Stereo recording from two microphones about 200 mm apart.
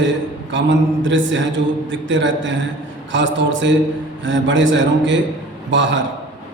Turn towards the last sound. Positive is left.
turn(degrees=-65)  # may be behind; listen again after turning